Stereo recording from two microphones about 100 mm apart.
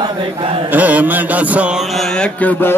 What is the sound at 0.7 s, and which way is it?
Mantra, 15° right (ahead or behind).